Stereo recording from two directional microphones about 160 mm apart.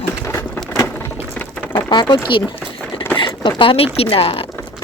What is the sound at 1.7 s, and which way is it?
Speech, 30° left (ahead or behind).